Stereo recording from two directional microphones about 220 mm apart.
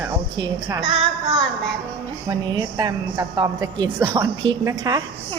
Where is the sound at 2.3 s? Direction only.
15° right (ahead or behind).